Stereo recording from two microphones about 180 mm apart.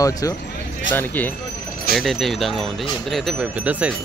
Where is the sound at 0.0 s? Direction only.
20° left (ahead or behind).